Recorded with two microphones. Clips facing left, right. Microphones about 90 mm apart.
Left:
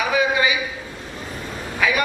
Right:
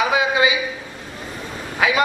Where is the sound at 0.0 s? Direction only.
20° right (ahead or behind).